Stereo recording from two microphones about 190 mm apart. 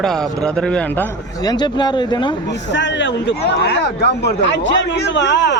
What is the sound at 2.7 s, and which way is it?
Speech, 70° left (ahead or behind).